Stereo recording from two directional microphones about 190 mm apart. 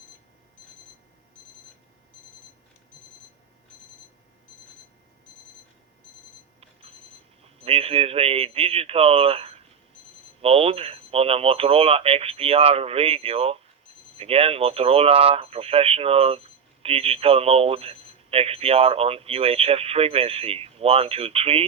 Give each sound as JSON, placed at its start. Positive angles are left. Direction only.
{"t": 7.4, "sound": "speech", "side_deg": -30}